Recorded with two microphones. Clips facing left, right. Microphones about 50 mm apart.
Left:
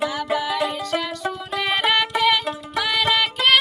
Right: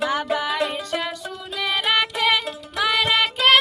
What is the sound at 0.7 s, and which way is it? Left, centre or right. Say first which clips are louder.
Music: left 2 dB; right.